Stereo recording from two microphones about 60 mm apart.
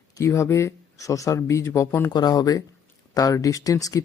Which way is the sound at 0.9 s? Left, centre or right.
Left.